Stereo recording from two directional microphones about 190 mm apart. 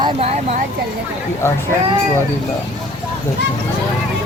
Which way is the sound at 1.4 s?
15° left (ahead or behind).